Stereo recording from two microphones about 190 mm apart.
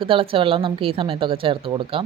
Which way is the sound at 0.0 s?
30° right (ahead or behind).